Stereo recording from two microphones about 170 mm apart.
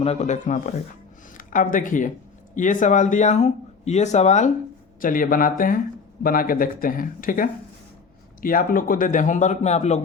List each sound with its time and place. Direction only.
0.0 s speech: 40° left (ahead or behind)